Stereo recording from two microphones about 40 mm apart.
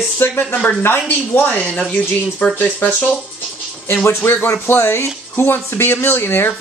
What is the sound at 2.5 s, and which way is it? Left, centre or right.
Speech, left.